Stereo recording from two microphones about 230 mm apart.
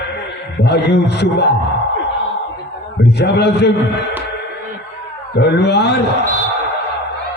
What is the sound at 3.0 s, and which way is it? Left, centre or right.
Speech, left.